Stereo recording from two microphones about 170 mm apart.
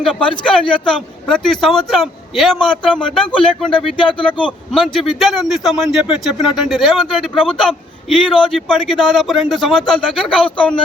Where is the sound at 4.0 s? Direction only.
30° left (ahead or behind).